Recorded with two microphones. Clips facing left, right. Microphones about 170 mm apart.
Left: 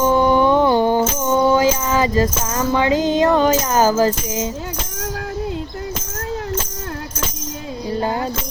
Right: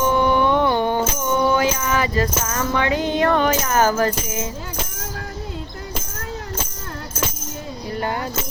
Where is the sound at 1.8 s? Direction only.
25° left (ahead or behind).